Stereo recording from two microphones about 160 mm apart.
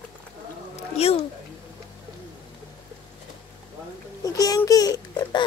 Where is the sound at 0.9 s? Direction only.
40° left (ahead or behind).